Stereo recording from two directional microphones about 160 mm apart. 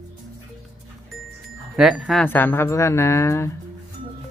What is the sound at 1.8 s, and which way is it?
Speech, centre (ahead or behind).